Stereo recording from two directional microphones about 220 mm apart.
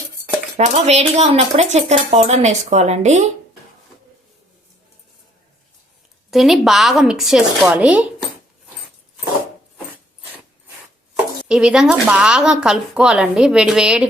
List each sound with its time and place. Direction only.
0.5 s speech: 30° right (ahead or behind)
6.3 s speech: centre (ahead or behind)
11.4 s speech: 5° right (ahead or behind)